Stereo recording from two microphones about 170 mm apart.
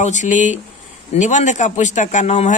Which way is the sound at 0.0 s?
45° left (ahead or behind).